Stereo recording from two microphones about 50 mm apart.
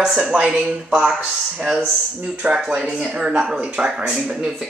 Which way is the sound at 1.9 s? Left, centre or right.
Centre.